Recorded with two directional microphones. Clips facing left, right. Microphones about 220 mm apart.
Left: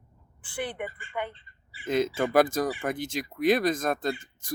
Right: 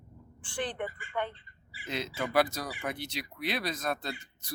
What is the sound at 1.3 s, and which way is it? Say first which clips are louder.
Bird: right 1 dB; 30° left (ahead or behind).